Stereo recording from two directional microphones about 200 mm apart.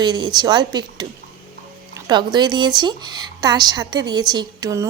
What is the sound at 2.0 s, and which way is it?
Speech, 20° right (ahead or behind).